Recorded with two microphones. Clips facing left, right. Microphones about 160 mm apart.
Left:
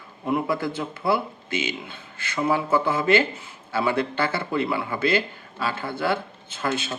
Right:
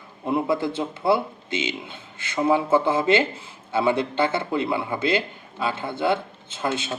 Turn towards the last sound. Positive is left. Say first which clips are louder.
# right 1 dB
turn(degrees=-20)  # may be behind; listen again after turning